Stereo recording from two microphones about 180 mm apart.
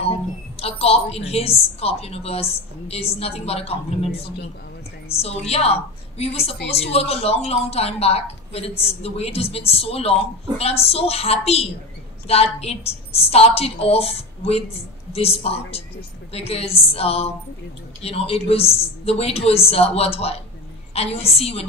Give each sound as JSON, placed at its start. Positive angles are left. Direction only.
{"t": 0.0, "sound": "a woman's voice", "side_deg": 35}